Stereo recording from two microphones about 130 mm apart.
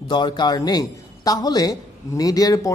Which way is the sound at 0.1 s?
35° left (ahead or behind).